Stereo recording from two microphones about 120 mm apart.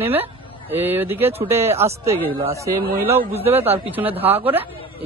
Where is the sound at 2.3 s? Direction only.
50° right (ahead or behind).